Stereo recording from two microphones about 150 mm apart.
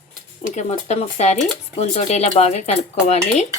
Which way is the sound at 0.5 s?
45° left (ahead or behind).